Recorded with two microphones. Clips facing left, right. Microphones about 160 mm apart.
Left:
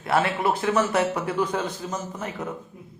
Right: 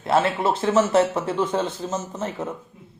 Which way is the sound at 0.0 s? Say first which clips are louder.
Right 2 dB; 25° right (ahead or behind).